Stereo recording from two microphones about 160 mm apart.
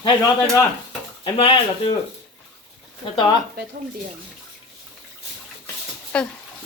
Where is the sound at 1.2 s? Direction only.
35° left (ahead or behind).